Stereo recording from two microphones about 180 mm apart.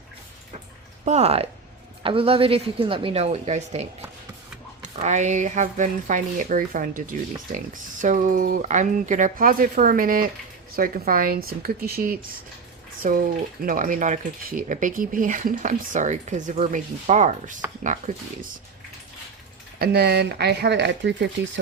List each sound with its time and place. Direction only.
1.0 s a woman's voice: 40° right (ahead or behind)
19.8 s speech: 65° right (ahead or behind); by 21.6 s 80° right